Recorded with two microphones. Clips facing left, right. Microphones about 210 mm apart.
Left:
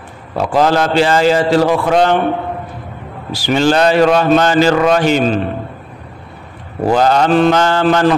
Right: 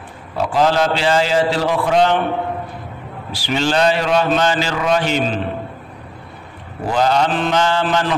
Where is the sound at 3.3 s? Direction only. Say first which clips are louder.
Left 5 dB; 45° left (ahead or behind).